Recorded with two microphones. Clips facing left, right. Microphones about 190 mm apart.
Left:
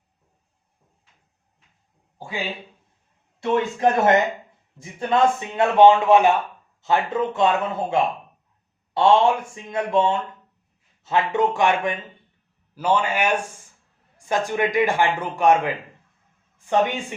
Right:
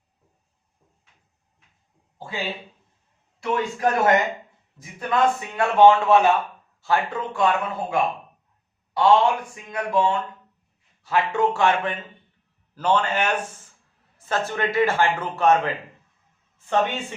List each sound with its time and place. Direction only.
2.1 s speech: 15° left (ahead or behind)
3.4 s a man's voice: 25° left (ahead or behind)